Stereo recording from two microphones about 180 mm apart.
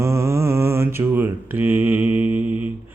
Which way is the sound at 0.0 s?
15° right (ahead or behind).